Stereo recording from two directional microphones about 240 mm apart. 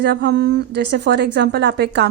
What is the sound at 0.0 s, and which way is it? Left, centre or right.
A woman's voice, right.